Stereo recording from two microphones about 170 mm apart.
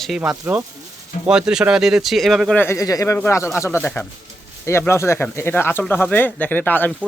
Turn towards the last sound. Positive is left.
turn(degrees=10)  # may be behind; listen again after turning